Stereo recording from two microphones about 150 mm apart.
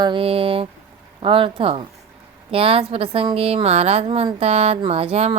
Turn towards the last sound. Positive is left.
turn(degrees=-40)  # may be behind; listen again after turning